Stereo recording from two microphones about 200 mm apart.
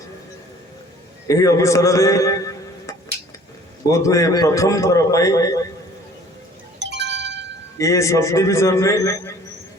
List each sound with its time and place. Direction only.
1.3 s a man's voice: 15° left (ahead or behind)
6.7 s music: 60° right (ahead or behind)
7.8 s a man's voice: 15° left (ahead or behind)